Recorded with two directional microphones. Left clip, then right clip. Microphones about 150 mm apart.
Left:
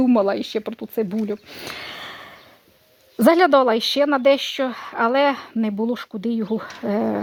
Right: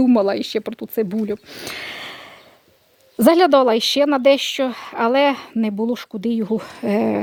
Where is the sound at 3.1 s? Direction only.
25° right (ahead or behind).